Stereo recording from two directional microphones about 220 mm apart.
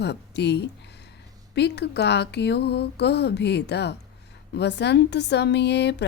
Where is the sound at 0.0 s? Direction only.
50° left (ahead or behind).